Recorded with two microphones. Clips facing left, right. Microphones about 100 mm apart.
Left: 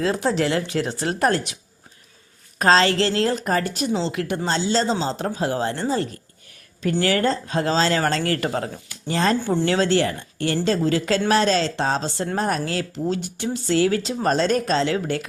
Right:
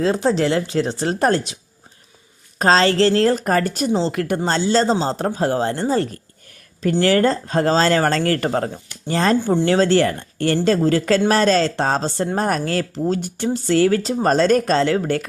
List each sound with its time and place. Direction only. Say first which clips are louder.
0.0 s speech: right 3 dB; 30° right (ahead or behind)
2.6 s speech: right 2 dB; 35° right (ahead or behind)
7.0 s speech: right 5 dB; 40° right (ahead or behind)